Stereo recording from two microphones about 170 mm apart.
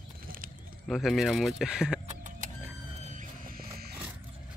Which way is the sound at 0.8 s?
Centre (ahead or behind).